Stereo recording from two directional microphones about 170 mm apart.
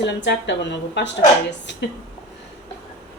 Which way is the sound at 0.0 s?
90° left.